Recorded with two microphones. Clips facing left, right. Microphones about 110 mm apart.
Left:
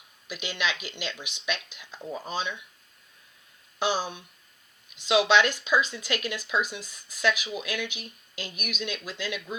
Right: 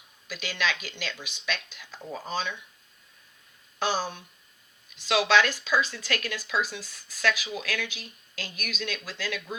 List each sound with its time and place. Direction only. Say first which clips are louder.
0.3 s speech: even; 15° left (ahead or behind)
3.8 s speech: left 1 dB; 15° left (ahead or behind)